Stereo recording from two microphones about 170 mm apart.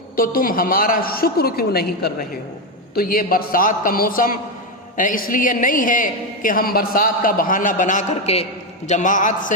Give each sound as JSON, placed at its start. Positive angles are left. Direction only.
{"t": 0.2, "sound": "a woman's voice", "side_deg": 55}